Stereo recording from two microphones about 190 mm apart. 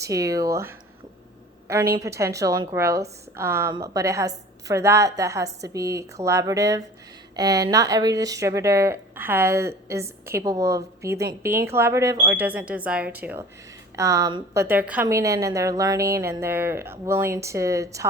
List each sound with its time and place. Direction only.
0.0 s a woman's voice: 15° right (ahead or behind)